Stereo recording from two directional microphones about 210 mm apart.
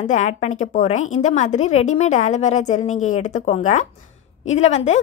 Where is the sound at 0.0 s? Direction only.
35° left (ahead or behind).